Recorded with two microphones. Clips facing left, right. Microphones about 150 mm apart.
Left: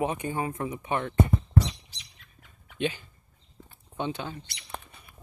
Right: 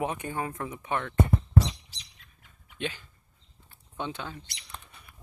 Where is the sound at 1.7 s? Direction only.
30° right (ahead or behind).